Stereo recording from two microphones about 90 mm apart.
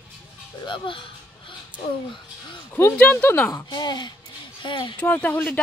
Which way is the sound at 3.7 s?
50° left (ahead or behind).